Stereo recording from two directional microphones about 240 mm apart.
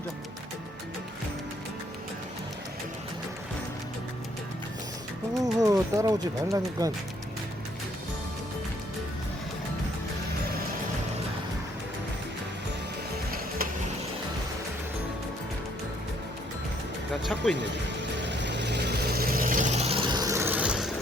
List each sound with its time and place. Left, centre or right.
5.4 s speech: centre
17.4 s speech: centre
18.2 s vehicle: right; by 20.9 s centre